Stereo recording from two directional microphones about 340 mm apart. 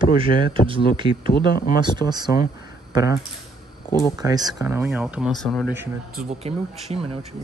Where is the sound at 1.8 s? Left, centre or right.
Centre.